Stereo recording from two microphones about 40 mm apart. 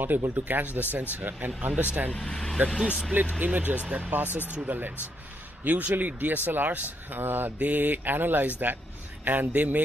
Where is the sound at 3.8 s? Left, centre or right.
Right.